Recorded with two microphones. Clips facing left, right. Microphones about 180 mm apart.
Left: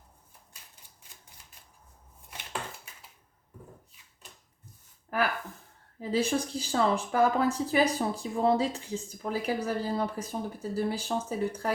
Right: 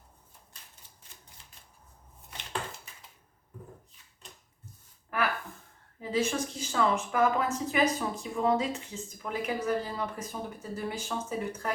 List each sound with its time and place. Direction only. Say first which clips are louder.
6.0 s speech: left 2 dB; 35° left (ahead or behind)